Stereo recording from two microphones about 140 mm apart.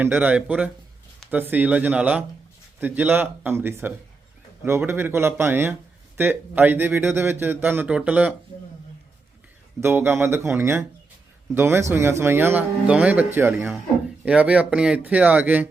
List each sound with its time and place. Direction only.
0.0 s a man's voice: 10° right (ahead or behind)
9.8 s a man's voice: 15° right (ahead or behind)